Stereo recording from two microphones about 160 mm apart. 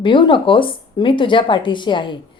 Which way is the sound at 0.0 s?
30° left (ahead or behind).